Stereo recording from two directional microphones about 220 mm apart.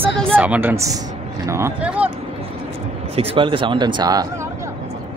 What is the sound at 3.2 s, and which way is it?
Speech, 25° right (ahead or behind).